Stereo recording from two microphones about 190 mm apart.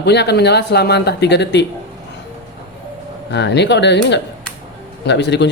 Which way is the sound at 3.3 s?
65° left (ahead or behind).